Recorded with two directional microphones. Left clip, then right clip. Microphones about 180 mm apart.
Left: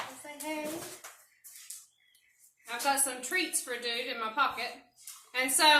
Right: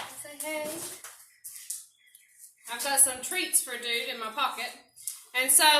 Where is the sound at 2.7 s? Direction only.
25° left (ahead or behind).